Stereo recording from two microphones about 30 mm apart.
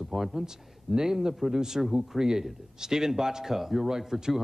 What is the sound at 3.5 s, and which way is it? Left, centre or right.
Speech, centre.